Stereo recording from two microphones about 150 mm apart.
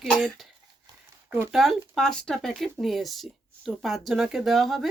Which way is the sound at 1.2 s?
15° right (ahead or behind).